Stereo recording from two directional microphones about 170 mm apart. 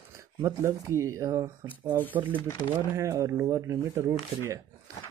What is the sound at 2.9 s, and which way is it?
Speech, 15° right (ahead or behind).